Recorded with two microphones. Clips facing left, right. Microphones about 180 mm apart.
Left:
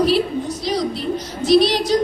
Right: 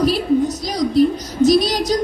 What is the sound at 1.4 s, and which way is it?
Child singing, 45° right (ahead or behind).